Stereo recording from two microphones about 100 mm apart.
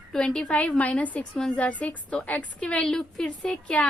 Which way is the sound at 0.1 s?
5° left (ahead or behind).